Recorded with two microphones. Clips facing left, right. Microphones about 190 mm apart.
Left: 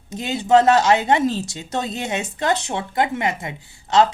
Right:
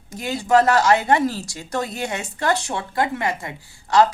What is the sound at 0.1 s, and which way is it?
A woman's voice, 20° left (ahead or behind).